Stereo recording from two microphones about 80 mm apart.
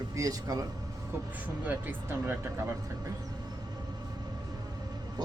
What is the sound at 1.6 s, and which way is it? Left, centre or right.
Speech, right.